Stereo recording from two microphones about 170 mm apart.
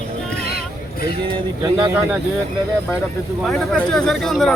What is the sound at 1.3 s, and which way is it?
Speech, 25° right (ahead or behind).